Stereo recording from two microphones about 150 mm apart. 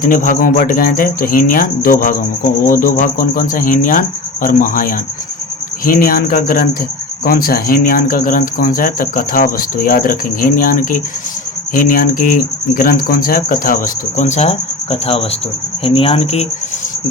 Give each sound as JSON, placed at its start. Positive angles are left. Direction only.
{"t": 0.0, "sound": "speech", "side_deg": 65}